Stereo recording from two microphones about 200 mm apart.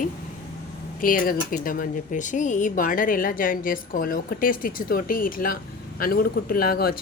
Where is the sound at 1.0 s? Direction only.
45° left (ahead or behind).